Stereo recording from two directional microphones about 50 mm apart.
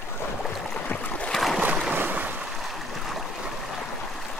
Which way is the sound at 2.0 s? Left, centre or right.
Right.